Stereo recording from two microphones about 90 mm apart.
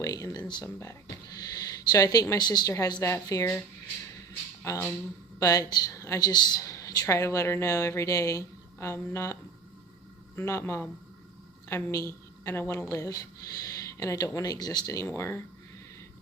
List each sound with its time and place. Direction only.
0.0 s a sound: 40° left (ahead or behind)
0.6 s speech: 35° left (ahead or behind)
1.4 s a sound: 45° left (ahead or behind)
2.4 s speech: 50° left (ahead or behind)
3.0 s speech: 35° left (ahead or behind)
4.6 s speech: 35° left (ahead or behind)
6.6 s a woman's voice: 35° left (ahead or behind)